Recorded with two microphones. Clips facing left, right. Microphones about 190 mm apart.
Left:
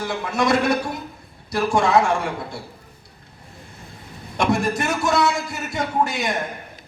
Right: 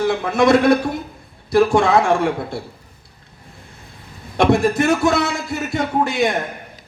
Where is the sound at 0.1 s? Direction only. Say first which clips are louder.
Right 4 dB; 55° right (ahead or behind).